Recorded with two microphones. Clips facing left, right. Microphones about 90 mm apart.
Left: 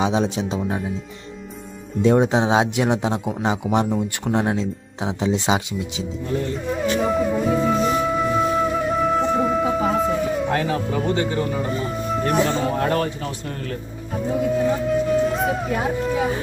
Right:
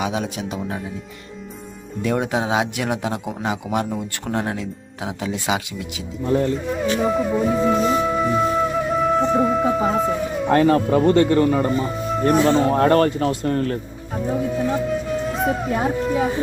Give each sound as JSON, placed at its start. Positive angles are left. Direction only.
{"t": 0.0, "sound": "speech", "side_deg": 25}
{"t": 2.0, "sound": "speech", "side_deg": 25}
{"t": 6.2, "sound": "speech", "side_deg": -40}
{"t": 6.7, "sound": "music", "side_deg": 0}
{"t": 10.5, "sound": "speech", "side_deg": -55}
{"t": 11.1, "sound": "a man's voice", "side_deg": -65}
{"t": 11.8, "sound": "speech", "side_deg": -35}
{"t": 12.7, "sound": "speech", "side_deg": -60}
{"t": 14.5, "sound": "music", "side_deg": 0}